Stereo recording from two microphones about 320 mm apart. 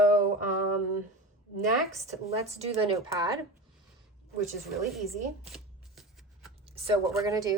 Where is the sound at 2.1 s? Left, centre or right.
Right.